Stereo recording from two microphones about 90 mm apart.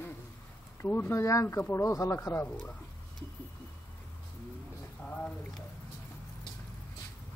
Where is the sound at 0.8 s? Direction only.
25° left (ahead or behind).